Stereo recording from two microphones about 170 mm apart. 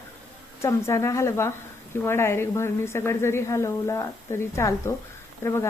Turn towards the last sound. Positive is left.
turn(degrees=15)  # may be behind; listen again after turning